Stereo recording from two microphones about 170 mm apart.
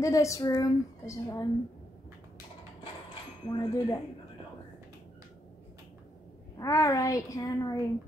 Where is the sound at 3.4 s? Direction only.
20° left (ahead or behind).